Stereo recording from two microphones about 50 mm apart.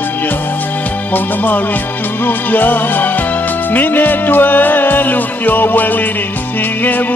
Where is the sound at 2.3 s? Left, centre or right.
Left.